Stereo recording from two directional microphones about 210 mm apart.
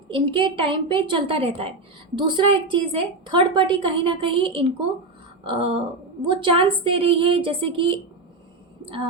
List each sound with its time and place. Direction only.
0.1 s a woman's voice: 25° right (ahead or behind)
5.4 s a sound: 25° right (ahead or behind)
6.2 s a woman's voice: 25° right (ahead or behind)